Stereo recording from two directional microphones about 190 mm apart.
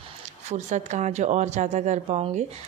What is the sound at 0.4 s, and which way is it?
Speech, 35° right (ahead or behind).